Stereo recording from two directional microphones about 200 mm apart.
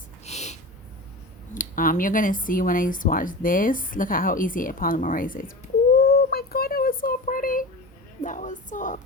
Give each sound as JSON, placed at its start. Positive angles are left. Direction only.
{"t": 0.3, "sound": "a sound", "side_deg": 35}
{"t": 1.5, "sound": "speech", "side_deg": 45}
{"t": 6.0, "sound": "child singing", "side_deg": 50}
{"t": 8.2, "sound": "speech", "side_deg": 40}